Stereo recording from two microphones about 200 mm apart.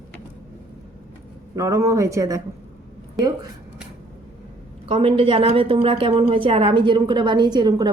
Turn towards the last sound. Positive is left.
turn(degrees=-20)  # may be behind; listen again after turning